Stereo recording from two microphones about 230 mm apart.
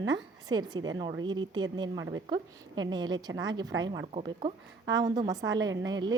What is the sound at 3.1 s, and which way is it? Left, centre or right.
Speech, right.